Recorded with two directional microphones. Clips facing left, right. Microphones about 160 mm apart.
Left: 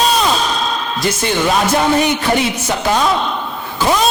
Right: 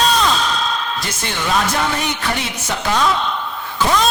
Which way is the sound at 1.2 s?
10° left (ahead or behind).